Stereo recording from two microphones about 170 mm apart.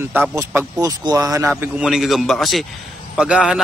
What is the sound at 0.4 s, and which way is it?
Speech, 15° right (ahead or behind).